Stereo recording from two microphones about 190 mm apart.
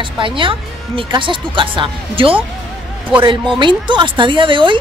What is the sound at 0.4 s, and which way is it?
A woman's voice, 25° right (ahead or behind).